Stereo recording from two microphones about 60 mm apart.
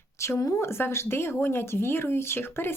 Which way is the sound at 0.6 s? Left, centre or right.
Left.